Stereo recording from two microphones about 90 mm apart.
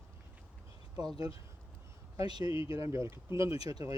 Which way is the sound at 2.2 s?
50° right (ahead or behind).